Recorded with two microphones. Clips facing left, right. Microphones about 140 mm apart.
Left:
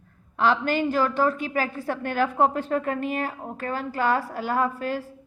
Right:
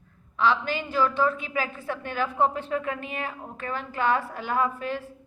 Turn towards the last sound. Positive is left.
turn(degrees=40)  # may be behind; listen again after turning